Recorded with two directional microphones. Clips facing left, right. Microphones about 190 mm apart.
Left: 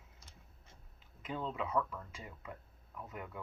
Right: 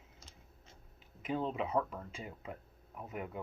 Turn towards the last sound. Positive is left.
turn(degrees=-20)  # may be behind; listen again after turning